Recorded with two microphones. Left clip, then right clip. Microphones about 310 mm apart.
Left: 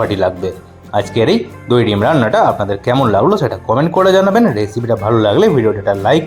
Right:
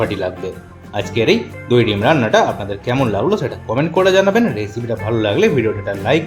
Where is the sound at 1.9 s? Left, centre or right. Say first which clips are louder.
Left 2 dB; centre.